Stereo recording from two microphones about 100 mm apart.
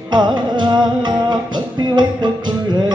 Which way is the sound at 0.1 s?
50° right (ahead or behind).